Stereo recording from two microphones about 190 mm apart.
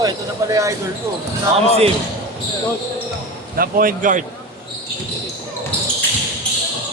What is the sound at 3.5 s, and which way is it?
Speech, 50° right (ahead or behind).